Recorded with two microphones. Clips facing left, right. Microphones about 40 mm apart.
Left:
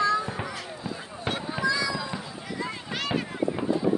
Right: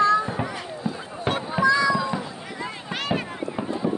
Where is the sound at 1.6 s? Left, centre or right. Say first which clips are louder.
Right 8 dB; right.